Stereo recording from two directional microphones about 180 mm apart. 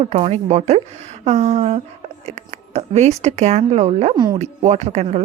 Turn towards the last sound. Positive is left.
turn(degrees=-35)  # may be behind; listen again after turning